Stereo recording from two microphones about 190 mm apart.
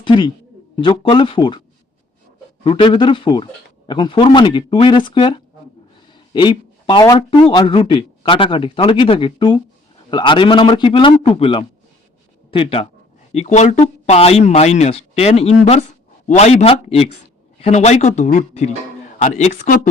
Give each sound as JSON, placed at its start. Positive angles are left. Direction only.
{"t": 0.0, "sound": "speech", "side_deg": 25}
{"t": 2.6, "sound": "speech", "side_deg": 25}
{"t": 6.3, "sound": "speech", "side_deg": 25}